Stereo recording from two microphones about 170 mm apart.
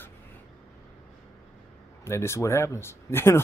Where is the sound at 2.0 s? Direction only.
15° left (ahead or behind).